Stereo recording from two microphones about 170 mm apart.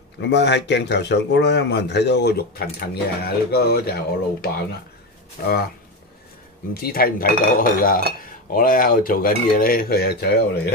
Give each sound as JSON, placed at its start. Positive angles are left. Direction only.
{"t": 0.3, "sound": "speech", "side_deg": 90}
{"t": 6.7, "sound": "speech", "side_deg": 60}